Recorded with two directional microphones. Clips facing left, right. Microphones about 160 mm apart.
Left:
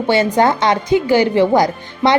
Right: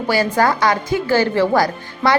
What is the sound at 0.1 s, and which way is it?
A woman's voice, 20° left (ahead or behind).